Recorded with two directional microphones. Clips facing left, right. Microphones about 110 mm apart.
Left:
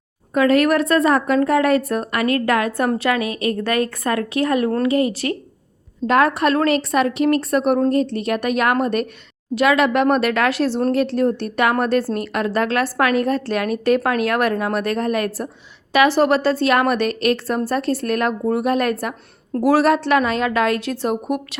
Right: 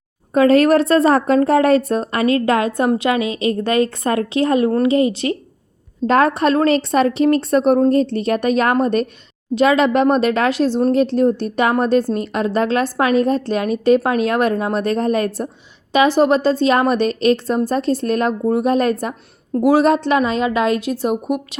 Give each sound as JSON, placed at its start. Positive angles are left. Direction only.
{"t": 0.3, "sound": "a woman's voice", "side_deg": -30}